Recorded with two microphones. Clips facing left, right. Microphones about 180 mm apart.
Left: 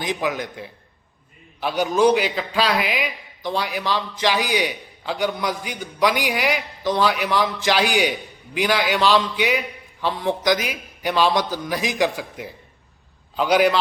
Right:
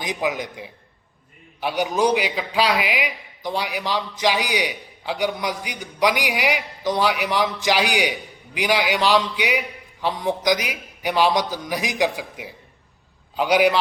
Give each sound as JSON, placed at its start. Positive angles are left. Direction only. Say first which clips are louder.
{"t": 0.0, "sound": "a man's voice", "louder": "left 1 dB", "side_deg": -15}